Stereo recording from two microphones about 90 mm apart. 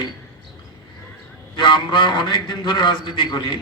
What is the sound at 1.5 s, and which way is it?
A man's voice, 55° left (ahead or behind).